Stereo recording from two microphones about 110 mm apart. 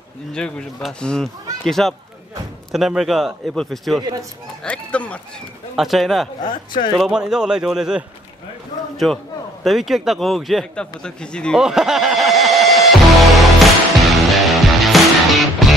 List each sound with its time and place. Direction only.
0.3 s a man's voice: 10° left (ahead or behind)
4.0 s speech: 35° right (ahead or behind)
4.6 s speech: 10° left (ahead or behind)
5.8 s a man's voice: centre (ahead or behind)
6.4 s speech: 45° left (ahead or behind)
7.0 s a man's voice: 5° right (ahead or behind)
11.5 s music: 5° right (ahead or behind)